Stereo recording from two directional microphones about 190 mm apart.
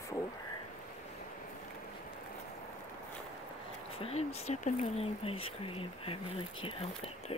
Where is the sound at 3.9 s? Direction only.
30° left (ahead or behind).